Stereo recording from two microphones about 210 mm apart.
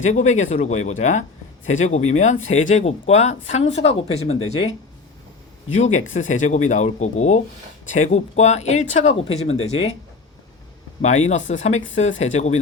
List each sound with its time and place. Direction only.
0.0 s speech: 35° left (ahead or behind)
5.7 s speech: 35° left (ahead or behind)
11.0 s speech: 35° left (ahead or behind)